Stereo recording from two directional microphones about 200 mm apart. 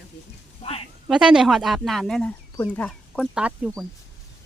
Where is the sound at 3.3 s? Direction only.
5° right (ahead or behind).